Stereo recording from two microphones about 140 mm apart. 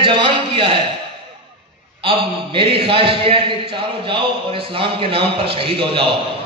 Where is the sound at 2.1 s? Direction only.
40° right (ahead or behind).